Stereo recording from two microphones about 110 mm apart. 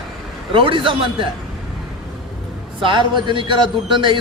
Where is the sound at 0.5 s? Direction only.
50° right (ahead or behind).